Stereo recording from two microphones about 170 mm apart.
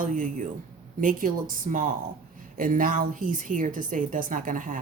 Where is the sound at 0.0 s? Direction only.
50° right (ahead or behind).